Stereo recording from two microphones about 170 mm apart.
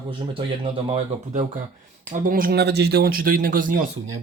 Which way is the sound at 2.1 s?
55° right (ahead or behind).